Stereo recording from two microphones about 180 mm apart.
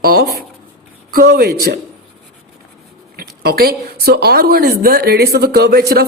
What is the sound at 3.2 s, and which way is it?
A woman's voice, 60° right (ahead or behind).